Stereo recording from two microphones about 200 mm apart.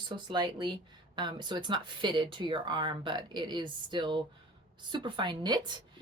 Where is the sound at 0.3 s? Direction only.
20° right (ahead or behind).